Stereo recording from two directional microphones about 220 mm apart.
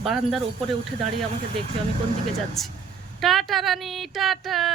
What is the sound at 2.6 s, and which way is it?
Speech, centre (ahead or behind).